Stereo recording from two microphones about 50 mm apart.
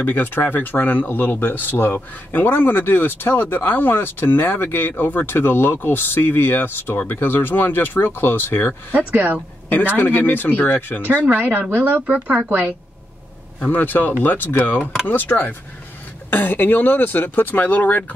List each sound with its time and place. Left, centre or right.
0.0 s speech: left
8.9 s speech: right
9.9 s speech: left
11.2 s speech: right
13.7 s speech: left
15.2 s speech: left
16.3 s speech: left